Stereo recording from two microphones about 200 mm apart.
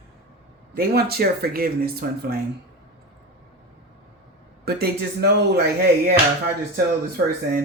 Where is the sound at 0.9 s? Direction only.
50° right (ahead or behind).